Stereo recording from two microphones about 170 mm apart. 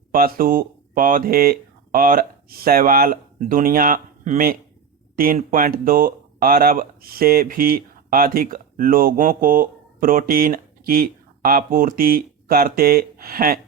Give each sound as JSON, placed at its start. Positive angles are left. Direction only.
{"t": 0.1, "sound": "speech", "side_deg": -60}